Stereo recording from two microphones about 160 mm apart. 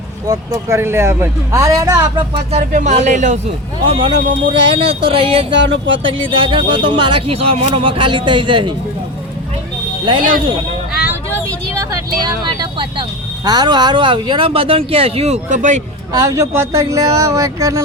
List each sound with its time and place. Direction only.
0.3 s speech: 20° right (ahead or behind)
2.5 s speech: 50° right (ahead or behind)
3.8 s speech: 35° right (ahead or behind)
10.1 s speech: 30° right (ahead or behind)
11.0 s speech: 15° right (ahead or behind); by 15.8 s 50° right (ahead or behind)
16.1 s speech: 20° right (ahead or behind)